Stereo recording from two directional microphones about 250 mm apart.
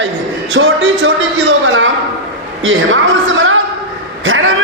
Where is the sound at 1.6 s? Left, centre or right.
Right.